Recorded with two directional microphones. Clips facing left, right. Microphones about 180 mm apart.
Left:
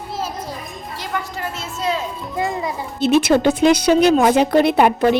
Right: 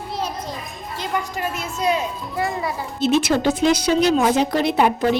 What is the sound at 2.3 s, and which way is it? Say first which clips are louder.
Speech: left 2 dB; 20° left (ahead or behind).